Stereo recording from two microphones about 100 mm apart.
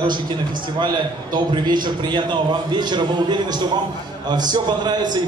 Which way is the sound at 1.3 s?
50° right (ahead or behind).